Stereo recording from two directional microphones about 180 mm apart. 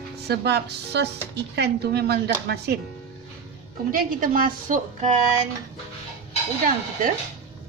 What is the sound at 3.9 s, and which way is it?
Speech, 50° right (ahead or behind).